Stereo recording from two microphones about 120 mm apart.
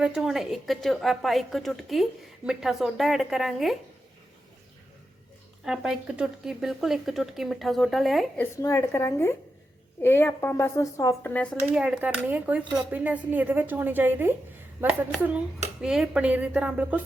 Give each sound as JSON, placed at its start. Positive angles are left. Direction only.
{"t": 0.0, "sound": "speech", "side_deg": -5}
{"t": 5.6, "sound": "speech", "side_deg": -5}
{"t": 8.6, "sound": "a woman's voice", "side_deg": 25}
{"t": 11.7, "sound": "speech", "side_deg": -10}
{"t": 15.8, "sound": "speech", "side_deg": -5}